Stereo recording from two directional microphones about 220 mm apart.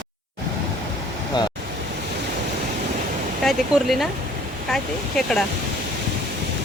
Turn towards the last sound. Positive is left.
turn(degrees=0)  # may be behind; listen again after turning